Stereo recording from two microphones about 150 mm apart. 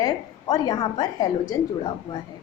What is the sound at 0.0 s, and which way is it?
A woman's voice, 25° left (ahead or behind).